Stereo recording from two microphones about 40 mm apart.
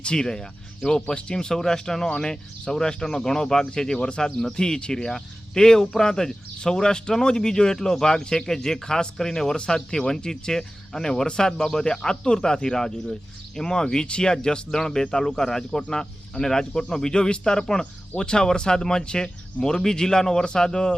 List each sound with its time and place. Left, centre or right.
0.0 s speech: left